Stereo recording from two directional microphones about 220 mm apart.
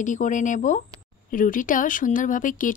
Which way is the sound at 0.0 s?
35° left (ahead or behind).